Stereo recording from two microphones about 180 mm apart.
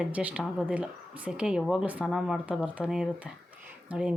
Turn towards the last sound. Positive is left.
turn(degrees=-5)  # may be behind; listen again after turning